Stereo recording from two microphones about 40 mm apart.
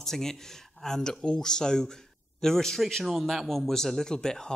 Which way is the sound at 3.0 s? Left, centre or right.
Centre.